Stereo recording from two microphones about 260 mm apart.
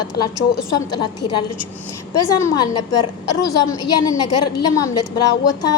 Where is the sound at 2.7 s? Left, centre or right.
Left.